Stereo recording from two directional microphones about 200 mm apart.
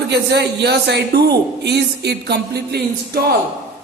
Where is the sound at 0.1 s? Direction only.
55° right (ahead or behind).